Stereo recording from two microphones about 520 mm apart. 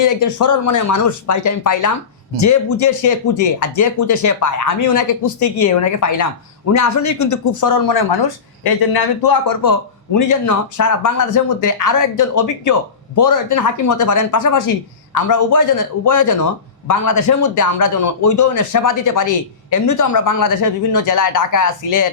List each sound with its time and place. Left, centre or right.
0.0 s a man's voice: left